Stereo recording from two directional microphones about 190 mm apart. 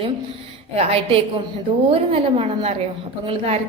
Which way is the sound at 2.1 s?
35° right (ahead or behind).